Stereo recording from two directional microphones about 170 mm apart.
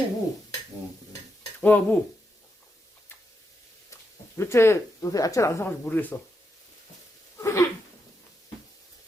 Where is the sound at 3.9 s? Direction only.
15° left (ahead or behind).